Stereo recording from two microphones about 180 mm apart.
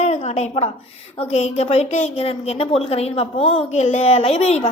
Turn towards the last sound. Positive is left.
turn(degrees=35)  # may be behind; listen again after turning